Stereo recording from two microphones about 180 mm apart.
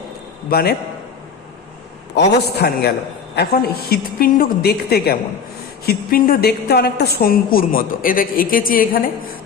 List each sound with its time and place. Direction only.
0.5 s a woman's voice: 60° left (ahead or behind)
2.1 s a woman's voice: 70° left (ahead or behind); by 9.0 s 50° left (ahead or behind)